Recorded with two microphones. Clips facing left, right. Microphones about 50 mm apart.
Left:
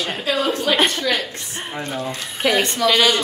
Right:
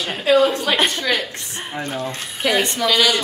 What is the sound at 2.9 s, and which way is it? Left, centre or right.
Speech, left.